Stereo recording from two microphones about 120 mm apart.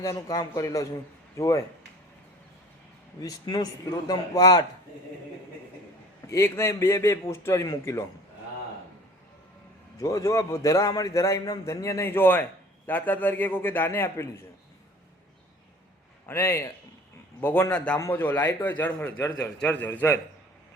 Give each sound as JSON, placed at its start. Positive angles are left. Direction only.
{"t": 0.0, "sound": "a man's voice", "side_deg": 25}
{"t": 3.2, "sound": "a man's voice", "side_deg": 30}
{"t": 6.2, "sound": "a man's voice", "side_deg": 25}
{"t": 10.0, "sound": "a man's voice", "side_deg": 25}
{"t": 16.2, "sound": "a man's voice", "side_deg": 20}